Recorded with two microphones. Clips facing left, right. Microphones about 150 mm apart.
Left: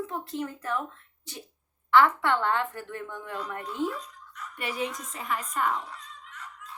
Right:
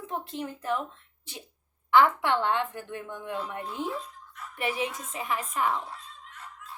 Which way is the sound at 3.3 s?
25° right (ahead or behind).